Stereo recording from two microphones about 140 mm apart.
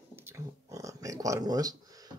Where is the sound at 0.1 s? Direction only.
15° right (ahead or behind).